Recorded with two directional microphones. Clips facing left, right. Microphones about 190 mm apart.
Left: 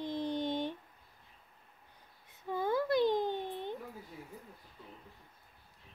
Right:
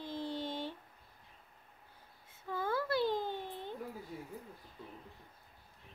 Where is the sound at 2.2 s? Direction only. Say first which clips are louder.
Left 3 dB; 20° left (ahead or behind).